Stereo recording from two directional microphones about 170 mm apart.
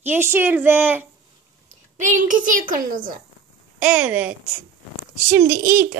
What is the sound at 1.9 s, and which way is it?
A woman's voice, 50° right (ahead or behind).